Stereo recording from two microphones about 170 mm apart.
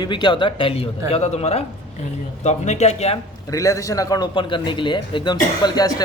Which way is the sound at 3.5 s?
20° left (ahead or behind).